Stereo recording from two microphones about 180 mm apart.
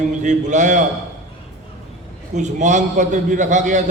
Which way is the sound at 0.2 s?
40° right (ahead or behind).